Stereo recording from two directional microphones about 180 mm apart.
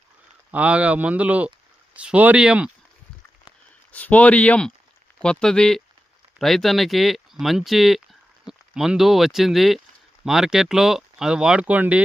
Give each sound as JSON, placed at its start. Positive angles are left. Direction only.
{"t": 0.5, "sound": "speech", "side_deg": -5}
{"t": 3.9, "sound": "speech", "side_deg": 10}